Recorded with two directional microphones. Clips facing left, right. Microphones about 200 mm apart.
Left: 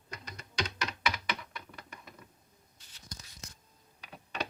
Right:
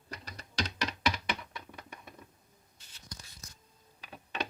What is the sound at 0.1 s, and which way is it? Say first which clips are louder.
Typing: even; 35° right (ahead or behind).